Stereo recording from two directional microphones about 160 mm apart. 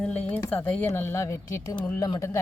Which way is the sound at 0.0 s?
10° left (ahead or behind).